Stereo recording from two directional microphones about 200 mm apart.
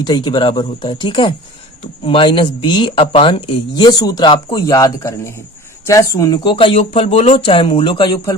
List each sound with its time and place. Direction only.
0.0 s speech: 20° left (ahead or behind)